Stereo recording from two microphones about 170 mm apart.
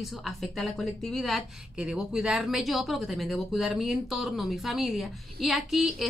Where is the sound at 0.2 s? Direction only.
Centre (ahead or behind).